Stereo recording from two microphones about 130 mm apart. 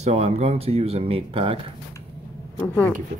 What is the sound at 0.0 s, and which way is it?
Speech, 55° right (ahead or behind).